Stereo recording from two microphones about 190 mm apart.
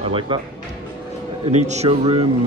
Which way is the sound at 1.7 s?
35° right (ahead or behind).